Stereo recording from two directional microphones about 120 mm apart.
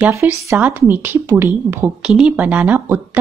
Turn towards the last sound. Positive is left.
turn(degrees=-15)  # may be behind; listen again after turning